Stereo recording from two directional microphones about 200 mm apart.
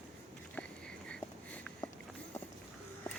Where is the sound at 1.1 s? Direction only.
5° left (ahead or behind).